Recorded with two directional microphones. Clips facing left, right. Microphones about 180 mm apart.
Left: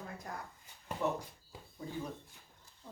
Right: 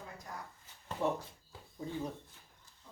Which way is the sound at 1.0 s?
25° right (ahead or behind).